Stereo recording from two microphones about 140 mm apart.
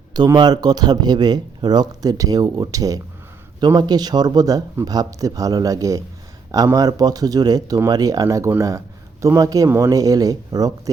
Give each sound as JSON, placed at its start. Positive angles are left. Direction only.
{"t": 0.1, "sound": "speech", "side_deg": -30}